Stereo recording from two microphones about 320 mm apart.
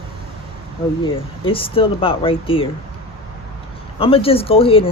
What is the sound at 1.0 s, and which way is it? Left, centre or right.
Speech, centre.